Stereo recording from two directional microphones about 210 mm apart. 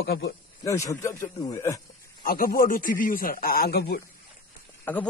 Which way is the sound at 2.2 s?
45° left (ahead or behind).